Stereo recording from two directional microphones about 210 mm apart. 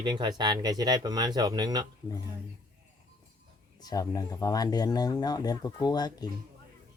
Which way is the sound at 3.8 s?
20° left (ahead or behind).